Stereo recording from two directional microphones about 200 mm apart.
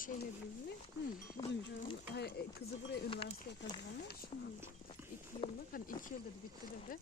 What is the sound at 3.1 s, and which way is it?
Speech, 25° left (ahead or behind).